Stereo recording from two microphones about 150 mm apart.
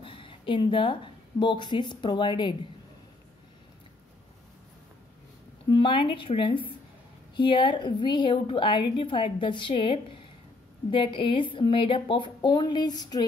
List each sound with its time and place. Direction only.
0.0 s a woman's voice: 35° left (ahead or behind)
5.7 s a woman's voice: 35° left (ahead or behind)